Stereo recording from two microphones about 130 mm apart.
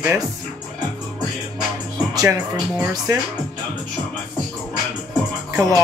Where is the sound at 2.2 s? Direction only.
30° right (ahead or behind).